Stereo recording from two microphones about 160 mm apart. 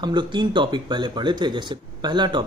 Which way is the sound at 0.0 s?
30° right (ahead or behind).